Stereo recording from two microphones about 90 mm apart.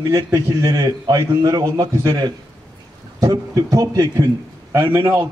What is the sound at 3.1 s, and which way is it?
A man's voice, 40° right (ahead or behind).